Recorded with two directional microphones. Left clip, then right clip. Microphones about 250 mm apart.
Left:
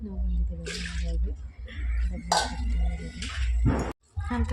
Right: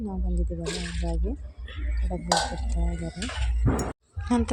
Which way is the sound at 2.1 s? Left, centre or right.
Right.